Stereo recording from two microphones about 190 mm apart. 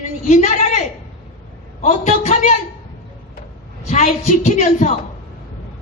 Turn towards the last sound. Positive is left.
turn(degrees=40)  # may be behind; listen again after turning